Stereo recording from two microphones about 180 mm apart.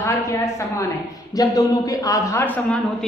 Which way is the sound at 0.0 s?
15° left (ahead or behind).